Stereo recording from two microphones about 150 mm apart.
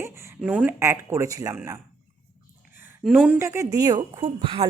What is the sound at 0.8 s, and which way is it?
Speech, 20° right (ahead or behind).